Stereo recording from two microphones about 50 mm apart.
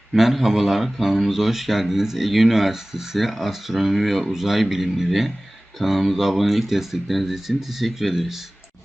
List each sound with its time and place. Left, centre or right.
0.1 s speech: centre